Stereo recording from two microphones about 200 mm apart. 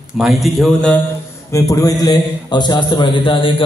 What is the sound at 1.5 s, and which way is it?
Mantra, 15° left (ahead or behind).